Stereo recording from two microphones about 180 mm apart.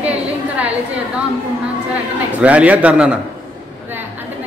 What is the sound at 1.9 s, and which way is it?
A man's voice, 10° right (ahead or behind).